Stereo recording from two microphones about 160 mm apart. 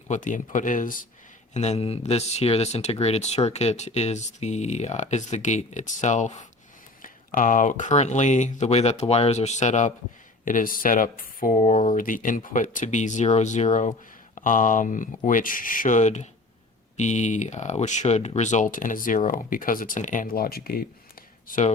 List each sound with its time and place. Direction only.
0.1 s speech: 55° left (ahead or behind)
1.5 s speech: 45° left (ahead or behind); by 20.8 s 65° left (ahead or behind)
21.4 s speech: 55° left (ahead or behind)